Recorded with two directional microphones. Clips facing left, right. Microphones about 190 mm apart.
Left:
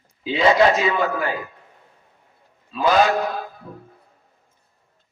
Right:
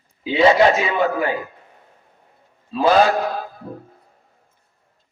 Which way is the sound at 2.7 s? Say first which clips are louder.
Right 4 dB; 30° right (ahead or behind).